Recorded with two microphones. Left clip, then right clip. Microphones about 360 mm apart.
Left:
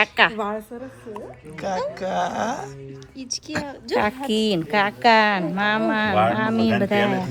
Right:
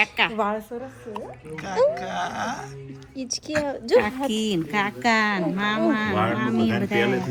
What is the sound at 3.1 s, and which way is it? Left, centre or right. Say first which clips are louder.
Speech: right 3 dB; centre.